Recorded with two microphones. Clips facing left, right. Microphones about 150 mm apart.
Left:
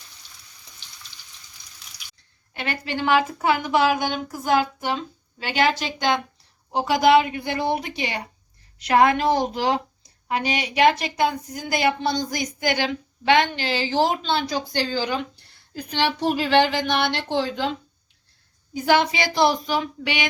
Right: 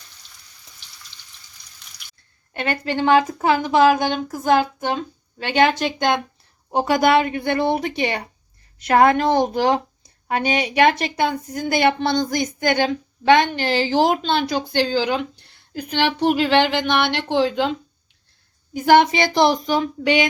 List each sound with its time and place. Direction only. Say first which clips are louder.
2.5 s a woman's voice: right 5 dB; 50° right (ahead or behind)
5.8 s a woman's voice: right 3 dB; 50° right (ahead or behind)
14.3 s a woman's voice: right 3 dB; 60° right (ahead or behind)
18.9 s a woman's voice: right 6 dB; 55° right (ahead or behind)